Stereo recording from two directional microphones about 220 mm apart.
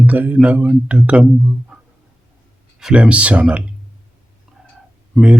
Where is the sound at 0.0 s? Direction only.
10° right (ahead or behind).